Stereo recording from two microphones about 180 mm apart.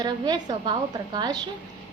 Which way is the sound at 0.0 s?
25° right (ahead or behind).